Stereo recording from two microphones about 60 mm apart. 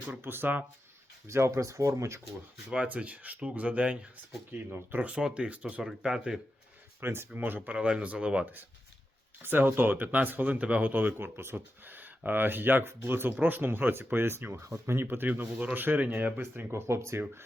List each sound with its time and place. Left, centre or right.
0.2 s speech: right
1.3 s speech: right
2.6 s speech: right
4.5 s speech: right
5.0 s speech: centre
5.8 s speech: centre
7.0 s speech: right
7.7 s speech: centre
9.4 s speech: right
16.4 s speech: right